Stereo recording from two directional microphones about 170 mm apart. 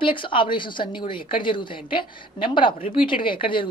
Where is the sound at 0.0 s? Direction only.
30° left (ahead or behind).